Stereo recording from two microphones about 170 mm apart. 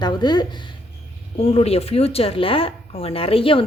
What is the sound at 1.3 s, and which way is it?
Speech, 35° left (ahead or behind).